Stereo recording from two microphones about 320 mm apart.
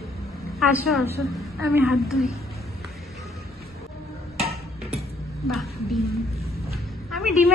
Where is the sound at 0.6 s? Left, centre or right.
Centre.